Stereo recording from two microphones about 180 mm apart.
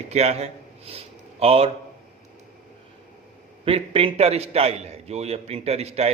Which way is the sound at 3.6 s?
30° right (ahead or behind).